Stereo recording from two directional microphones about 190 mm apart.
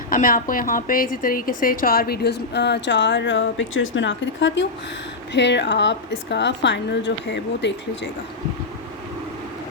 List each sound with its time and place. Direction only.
0.1 s a woman's voice: 45° left (ahead or behind); by 8.1 s 70° left (ahead or behind)